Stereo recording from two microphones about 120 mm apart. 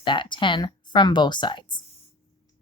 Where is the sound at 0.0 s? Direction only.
40° left (ahead or behind).